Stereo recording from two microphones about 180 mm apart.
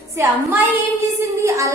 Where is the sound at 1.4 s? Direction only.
15° right (ahead or behind).